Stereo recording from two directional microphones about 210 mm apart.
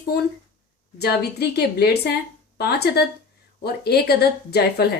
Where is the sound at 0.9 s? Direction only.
50° left (ahead or behind).